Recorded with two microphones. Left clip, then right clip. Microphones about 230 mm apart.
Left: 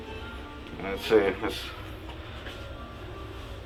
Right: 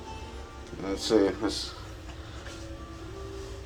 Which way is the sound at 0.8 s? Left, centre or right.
Centre.